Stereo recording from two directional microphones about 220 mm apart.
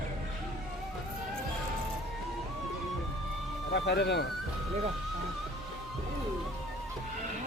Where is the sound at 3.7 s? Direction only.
50° left (ahead or behind).